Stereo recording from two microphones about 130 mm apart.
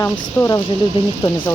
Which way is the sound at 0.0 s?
20° left (ahead or behind).